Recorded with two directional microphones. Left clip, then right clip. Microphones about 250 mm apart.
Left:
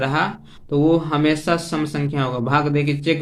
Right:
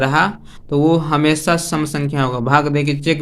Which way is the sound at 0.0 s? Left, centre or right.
Right.